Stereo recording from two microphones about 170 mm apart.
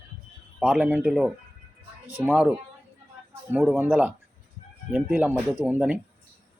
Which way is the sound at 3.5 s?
5° right (ahead or behind).